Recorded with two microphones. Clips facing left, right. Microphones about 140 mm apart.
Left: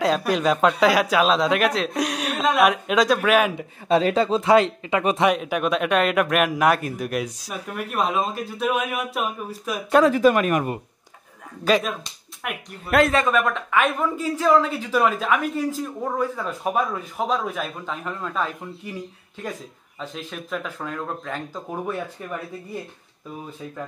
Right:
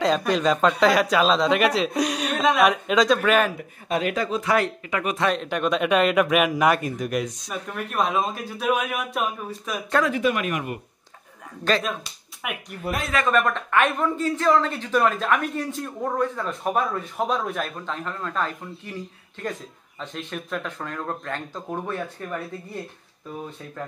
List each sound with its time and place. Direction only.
0.0 s speech: 5° left (ahead or behind)
3.5 s speech: 30° left (ahead or behind)
5.3 s speech: 5° left (ahead or behind)
10.0 s speech: 40° left (ahead or behind)
11.6 s a man's voice: 5° left (ahead or behind)
12.4 s a man's voice: 5° right (ahead or behind)
20.0 s a man's voice: 5° left (ahead or behind)